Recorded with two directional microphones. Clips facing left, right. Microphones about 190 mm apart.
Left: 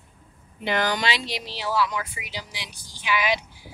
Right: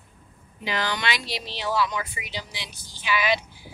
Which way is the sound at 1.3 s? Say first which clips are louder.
Even; 10° left (ahead or behind).